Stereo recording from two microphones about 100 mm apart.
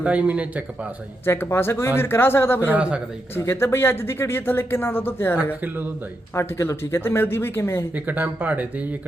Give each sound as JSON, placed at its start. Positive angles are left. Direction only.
{"t": 0.0, "sound": "speech", "side_deg": -15}
{"t": 1.2, "sound": "speech", "side_deg": 25}
{"t": 5.6, "sound": "a man's voice", "side_deg": -20}
{"t": 6.3, "sound": "speech", "side_deg": 30}
{"t": 7.9, "sound": "speech", "side_deg": -15}